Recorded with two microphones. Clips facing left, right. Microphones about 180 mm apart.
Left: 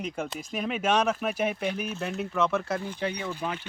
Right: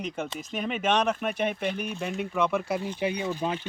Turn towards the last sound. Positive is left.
turn(degrees=-20)  # may be behind; listen again after turning